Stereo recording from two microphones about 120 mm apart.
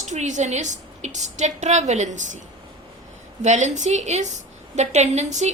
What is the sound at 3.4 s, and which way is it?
A woman's voice, 80° right.